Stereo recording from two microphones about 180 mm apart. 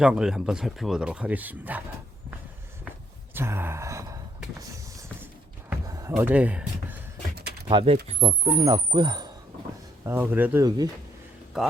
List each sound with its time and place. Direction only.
0.0 s speech: 5° right (ahead or behind)
3.3 s gasp: 15° right (ahead or behind)
4.7 s a sound: 15° right (ahead or behind)
6.1 s speech: 10° right (ahead or behind)
7.7 s speech: 30° right (ahead or behind)
10.0 s speech: 10° right (ahead or behind)